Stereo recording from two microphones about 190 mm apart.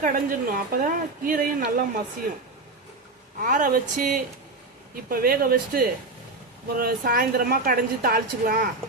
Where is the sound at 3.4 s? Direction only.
45° right (ahead or behind).